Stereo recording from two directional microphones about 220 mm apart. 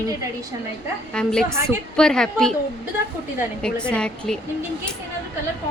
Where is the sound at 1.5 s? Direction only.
10° right (ahead or behind).